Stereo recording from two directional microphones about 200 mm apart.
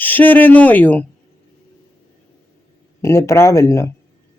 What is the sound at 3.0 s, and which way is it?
Speech, 15° left (ahead or behind).